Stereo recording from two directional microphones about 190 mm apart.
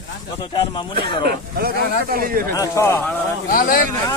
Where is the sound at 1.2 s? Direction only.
55° right (ahead or behind).